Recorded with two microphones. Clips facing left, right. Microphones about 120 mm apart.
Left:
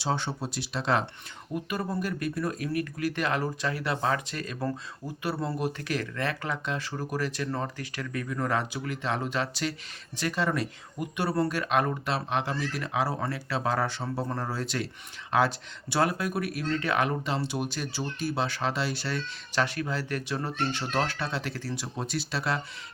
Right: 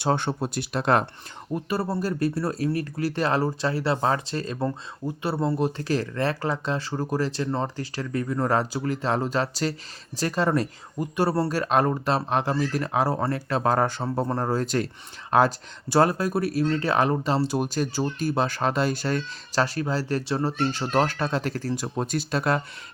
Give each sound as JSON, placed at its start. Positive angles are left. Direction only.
{"t": 0.0, "sound": "speech", "side_deg": -55}
{"t": 1.5, "sound": "speech", "side_deg": -35}